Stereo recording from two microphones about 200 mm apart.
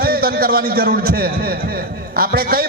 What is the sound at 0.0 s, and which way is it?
A man's voice, 50° right (ahead or behind).